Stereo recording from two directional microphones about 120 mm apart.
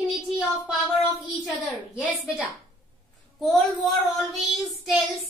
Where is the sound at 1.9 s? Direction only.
5° right (ahead or behind).